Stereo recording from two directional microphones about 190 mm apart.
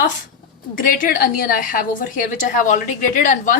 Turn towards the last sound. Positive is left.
turn(degrees=45)  # may be behind; listen again after turning